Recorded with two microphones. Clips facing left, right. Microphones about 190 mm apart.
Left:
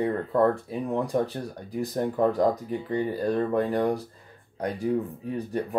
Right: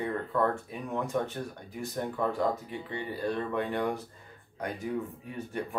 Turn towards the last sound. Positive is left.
turn(degrees=35)  # may be behind; listen again after turning